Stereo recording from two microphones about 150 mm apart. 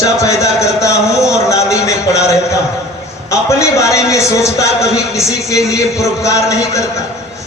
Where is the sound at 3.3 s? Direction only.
20° left (ahead or behind).